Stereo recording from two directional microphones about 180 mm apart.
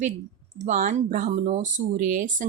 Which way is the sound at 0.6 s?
45° right (ahead or behind).